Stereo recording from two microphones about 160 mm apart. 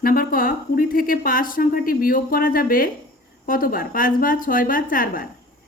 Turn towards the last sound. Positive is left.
turn(degrees=60)  # may be behind; listen again after turning